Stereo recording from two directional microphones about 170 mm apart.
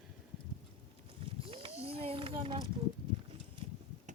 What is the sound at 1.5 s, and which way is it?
Speech, 35° right (ahead or behind).